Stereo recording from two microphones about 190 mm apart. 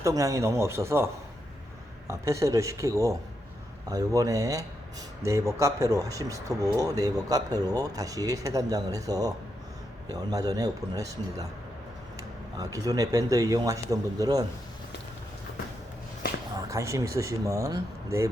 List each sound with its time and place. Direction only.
0.0 s speech: 15° right (ahead or behind)
12.7 s speech: 20° right (ahead or behind)
16.6 s speech: 15° right (ahead or behind)